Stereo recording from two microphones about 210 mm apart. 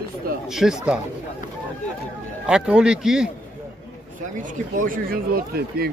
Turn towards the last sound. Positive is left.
turn(degrees=-45)  # may be behind; listen again after turning